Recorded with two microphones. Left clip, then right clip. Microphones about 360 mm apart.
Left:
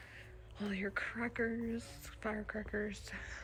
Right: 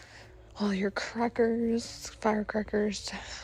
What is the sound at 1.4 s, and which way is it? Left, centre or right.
Speech, right.